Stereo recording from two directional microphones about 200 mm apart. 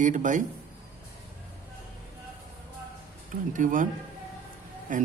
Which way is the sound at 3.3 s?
40° right (ahead or behind).